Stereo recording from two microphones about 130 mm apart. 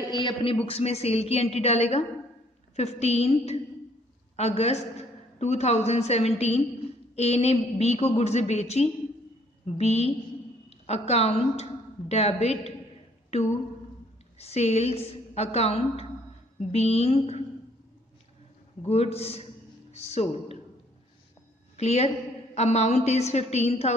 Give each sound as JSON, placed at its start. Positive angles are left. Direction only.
{"t": 0.1, "sound": "a man's voice", "side_deg": 35}
{"t": 0.7, "sound": "a woman's voice", "side_deg": 50}
{"t": 14.4, "sound": "a woman's voice", "side_deg": 55}
{"t": 18.9, "sound": "a woman's voice", "side_deg": 55}
{"t": 21.7, "sound": "a woman's voice", "side_deg": 55}